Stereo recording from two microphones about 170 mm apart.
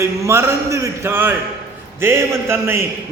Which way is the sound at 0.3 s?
15° right (ahead or behind).